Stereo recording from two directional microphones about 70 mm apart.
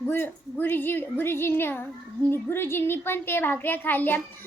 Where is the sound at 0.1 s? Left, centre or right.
Left.